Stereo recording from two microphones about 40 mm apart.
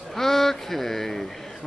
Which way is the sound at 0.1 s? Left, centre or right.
Centre.